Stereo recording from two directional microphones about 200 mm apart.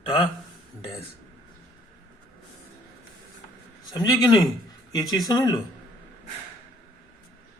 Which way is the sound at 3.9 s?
20° left (ahead or behind).